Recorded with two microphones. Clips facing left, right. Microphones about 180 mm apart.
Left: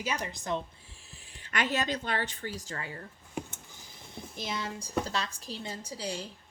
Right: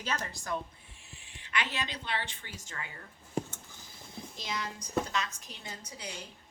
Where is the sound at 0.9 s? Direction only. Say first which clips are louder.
Left 1 dB; 35° left (ahead or behind).